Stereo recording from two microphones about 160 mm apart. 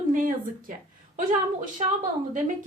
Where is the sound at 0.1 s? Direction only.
60° right (ahead or behind).